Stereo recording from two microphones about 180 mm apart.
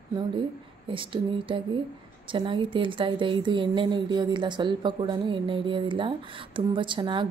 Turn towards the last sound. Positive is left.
turn(degrees=-25)  # may be behind; listen again after turning